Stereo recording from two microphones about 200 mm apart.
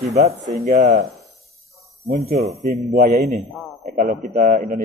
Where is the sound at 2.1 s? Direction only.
40° right (ahead or behind).